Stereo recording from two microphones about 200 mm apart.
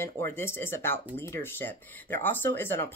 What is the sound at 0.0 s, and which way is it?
Speech, 10° left (ahead or behind).